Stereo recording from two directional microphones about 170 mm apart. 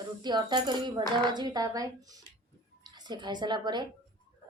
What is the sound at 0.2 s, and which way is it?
A woman's voice, 25° right (ahead or behind).